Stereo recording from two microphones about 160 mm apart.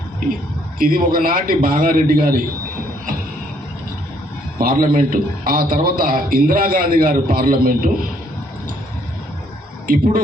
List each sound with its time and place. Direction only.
0.8 s a man's voice: 60° right (ahead or behind)
4.5 s a man's voice: 60° right (ahead or behind)
9.8 s speech: 60° right (ahead or behind)